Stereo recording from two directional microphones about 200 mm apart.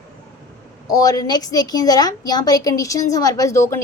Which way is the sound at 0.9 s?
20° left (ahead or behind).